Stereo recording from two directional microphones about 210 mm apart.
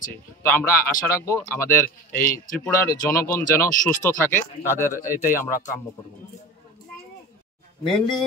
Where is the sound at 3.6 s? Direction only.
10° left (ahead or behind).